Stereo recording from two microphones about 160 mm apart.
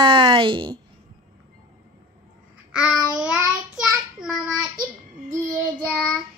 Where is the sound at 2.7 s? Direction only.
5° right (ahead or behind).